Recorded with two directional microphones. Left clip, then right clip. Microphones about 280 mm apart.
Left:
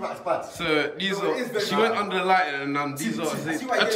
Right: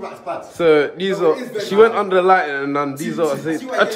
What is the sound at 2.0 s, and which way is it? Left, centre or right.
Speech, centre.